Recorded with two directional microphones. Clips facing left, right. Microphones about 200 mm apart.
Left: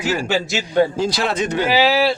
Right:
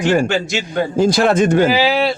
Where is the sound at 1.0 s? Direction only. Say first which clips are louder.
Right 7 dB; 50° right (ahead or behind).